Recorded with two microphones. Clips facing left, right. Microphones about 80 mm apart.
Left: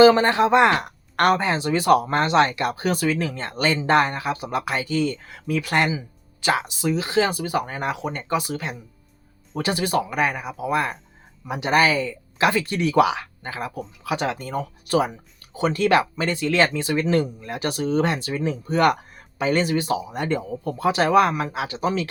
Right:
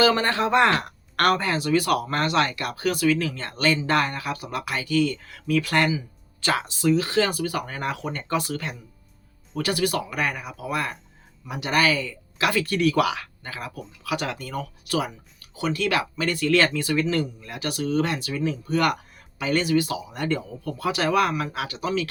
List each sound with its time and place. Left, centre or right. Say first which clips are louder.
0.0 s speech: left 6 dB; left